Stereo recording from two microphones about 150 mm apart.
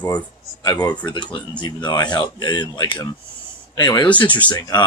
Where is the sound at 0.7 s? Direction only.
25° left (ahead or behind).